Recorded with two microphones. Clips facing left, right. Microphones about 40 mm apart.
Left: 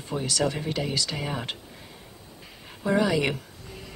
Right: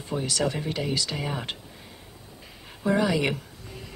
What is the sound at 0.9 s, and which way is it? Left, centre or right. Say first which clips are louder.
Speech: right 1 dB; right.